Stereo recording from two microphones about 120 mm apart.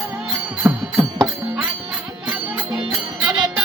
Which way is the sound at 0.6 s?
10° right (ahead or behind).